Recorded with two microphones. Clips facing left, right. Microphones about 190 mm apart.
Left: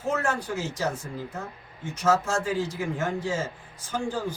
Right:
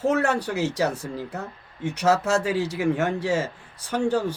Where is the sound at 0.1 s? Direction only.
70° right (ahead or behind).